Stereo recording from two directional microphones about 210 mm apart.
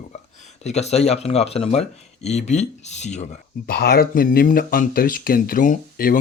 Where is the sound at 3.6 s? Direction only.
50° left (ahead or behind).